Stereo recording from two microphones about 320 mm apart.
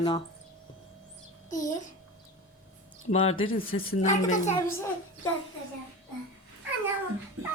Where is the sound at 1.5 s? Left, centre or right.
Left.